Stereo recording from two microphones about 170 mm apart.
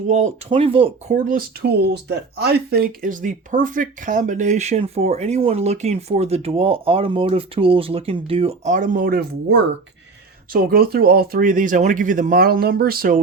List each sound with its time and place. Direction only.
0.1 s speech: 45° right (ahead or behind)
0.5 s speech: 35° right (ahead or behind)
1.1 s speech: 55° right (ahead or behind)